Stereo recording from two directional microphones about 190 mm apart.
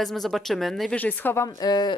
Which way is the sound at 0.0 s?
Centre (ahead or behind).